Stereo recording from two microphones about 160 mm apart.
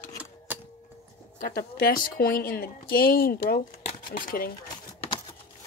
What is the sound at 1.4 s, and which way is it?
Speech, 65° left (ahead or behind).